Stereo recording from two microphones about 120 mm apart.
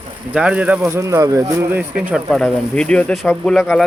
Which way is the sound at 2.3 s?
5° left (ahead or behind).